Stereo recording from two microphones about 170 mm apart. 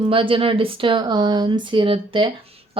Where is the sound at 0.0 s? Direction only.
30° right (ahead or behind).